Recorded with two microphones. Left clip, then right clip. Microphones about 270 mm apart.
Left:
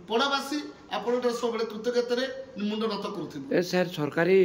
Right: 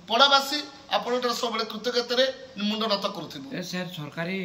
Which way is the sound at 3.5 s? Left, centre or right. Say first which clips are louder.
Left 10 dB; centre.